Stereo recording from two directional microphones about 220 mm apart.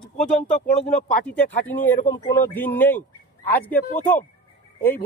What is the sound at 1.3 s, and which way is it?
Speech, 5° left (ahead or behind).